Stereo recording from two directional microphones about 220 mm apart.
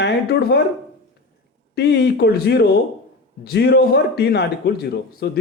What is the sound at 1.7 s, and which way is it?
Speech, 50° left (ahead or behind).